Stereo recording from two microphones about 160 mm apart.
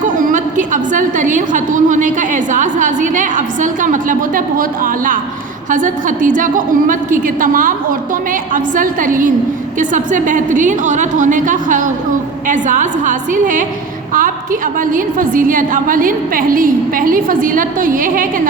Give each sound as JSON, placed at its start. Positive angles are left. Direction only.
{"t": 0.2, "sound": "a woman's voice", "side_deg": -55}